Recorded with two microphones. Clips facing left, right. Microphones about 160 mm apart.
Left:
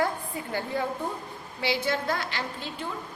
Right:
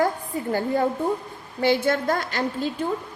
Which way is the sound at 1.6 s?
50° right (ahead or behind).